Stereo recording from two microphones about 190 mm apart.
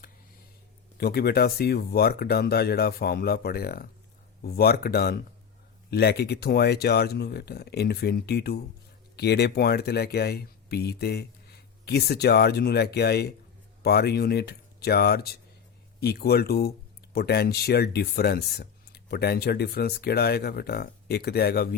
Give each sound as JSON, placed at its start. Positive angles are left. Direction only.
{"t": 0.9, "sound": "speech", "side_deg": 55}